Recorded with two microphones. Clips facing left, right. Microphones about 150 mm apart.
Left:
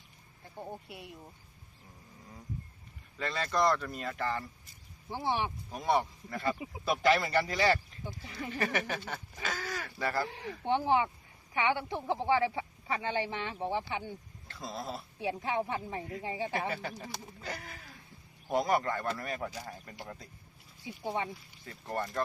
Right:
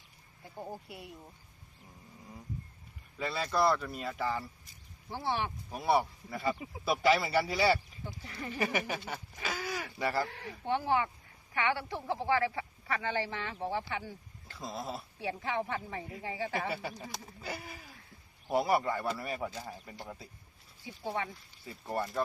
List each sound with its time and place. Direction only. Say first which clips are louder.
0.5 s speech: even; 5° right (ahead or behind)
3.2 s speech: even; 10° right (ahead or behind)
5.1 s speech: left 1 dB; 15° left (ahead or behind)
5.7 s speech: right 1 dB; 10° right (ahead or behind)
8.0 s speech: left 1 dB; 15° left (ahead or behind)
8.4 s speech: even; 10° right (ahead or behind)
10.2 s a woman's voice: left 2 dB; 20° left (ahead or behind)
14.4 s speech: even; centre (ahead or behind)
15.2 s speech: left 2 dB; 15° left (ahead or behind)
16.6 s speech: even; 5° right (ahead or behind)
20.8 s a woman's voice: left 1 dB; 20° left (ahead or behind)
21.6 s speech: right 1 dB; 5° right (ahead or behind)